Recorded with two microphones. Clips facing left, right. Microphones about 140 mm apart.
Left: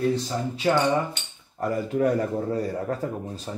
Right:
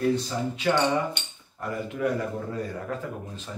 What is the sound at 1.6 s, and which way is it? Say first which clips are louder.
Speech: left 5 dB; 40° left (ahead or behind).